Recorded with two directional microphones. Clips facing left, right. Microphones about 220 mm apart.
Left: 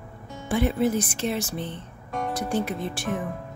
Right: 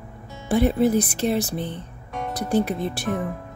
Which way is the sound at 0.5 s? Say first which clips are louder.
Right 4 dB; 40° right (ahead or behind).